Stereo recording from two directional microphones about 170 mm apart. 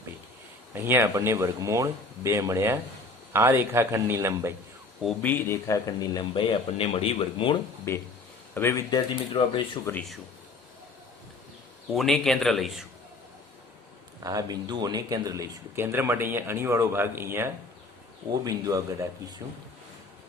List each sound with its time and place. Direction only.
0.7 s speech: 15° right (ahead or behind)
5.0 s speech: 10° left (ahead or behind); by 7.5 s 30° left (ahead or behind)
7.9 s speech: 15° left (ahead or behind)
11.9 s a man's voice: centre (ahead or behind)
14.3 s a man's voice: 20° right (ahead or behind)